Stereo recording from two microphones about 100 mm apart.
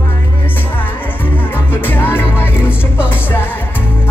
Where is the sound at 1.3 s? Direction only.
20° left (ahead or behind).